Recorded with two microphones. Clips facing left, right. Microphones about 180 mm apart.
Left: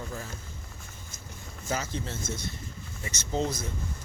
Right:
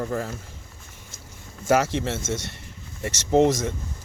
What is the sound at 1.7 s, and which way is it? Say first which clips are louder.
Speech: right 12 dB; 85° right.